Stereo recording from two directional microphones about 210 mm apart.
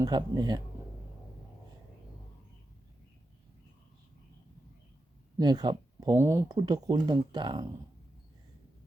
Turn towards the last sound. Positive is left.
turn(degrees=-20)  # may be behind; listen again after turning